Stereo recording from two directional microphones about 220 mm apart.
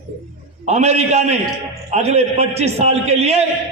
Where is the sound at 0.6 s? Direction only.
30° right (ahead or behind).